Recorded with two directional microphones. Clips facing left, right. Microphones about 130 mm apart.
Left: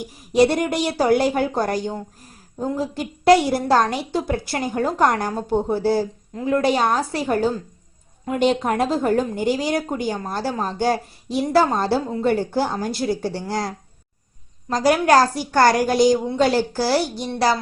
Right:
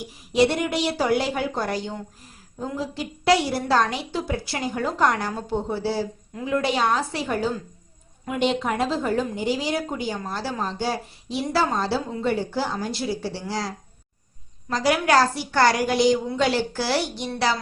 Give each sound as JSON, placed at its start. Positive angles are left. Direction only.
{"t": 0.3, "sound": "a woman's voice", "side_deg": 45}